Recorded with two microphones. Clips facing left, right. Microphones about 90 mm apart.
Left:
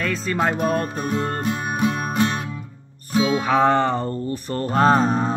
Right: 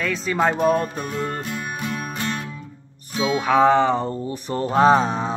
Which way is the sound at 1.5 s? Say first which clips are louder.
Left 6 dB; 15° left (ahead or behind).